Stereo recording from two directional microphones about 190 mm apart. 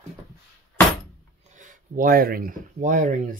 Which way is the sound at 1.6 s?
45° right (ahead or behind).